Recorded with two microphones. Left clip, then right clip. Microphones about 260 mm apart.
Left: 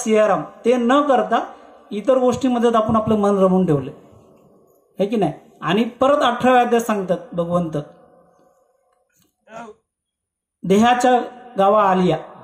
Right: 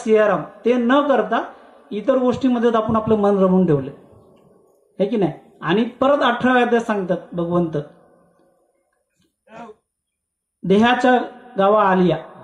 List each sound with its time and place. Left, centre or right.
0.0 s speech: left
4.9 s speech: left
9.5 s a sound: left
10.6 s a man's voice: left